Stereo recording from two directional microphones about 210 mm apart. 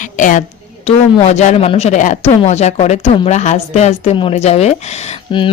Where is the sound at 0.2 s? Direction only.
40° left (ahead or behind).